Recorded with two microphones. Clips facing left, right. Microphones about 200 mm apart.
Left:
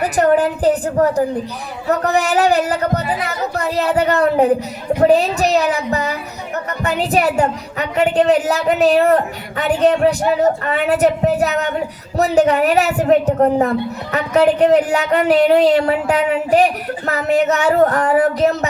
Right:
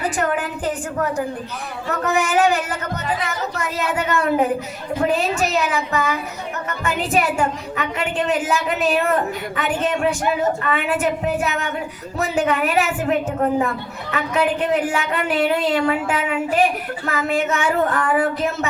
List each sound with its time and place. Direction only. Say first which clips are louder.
0.2 s a woman's voice: left 8 dB; 35° left (ahead or behind)